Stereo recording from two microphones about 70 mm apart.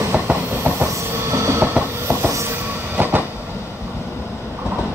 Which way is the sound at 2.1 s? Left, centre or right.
Right.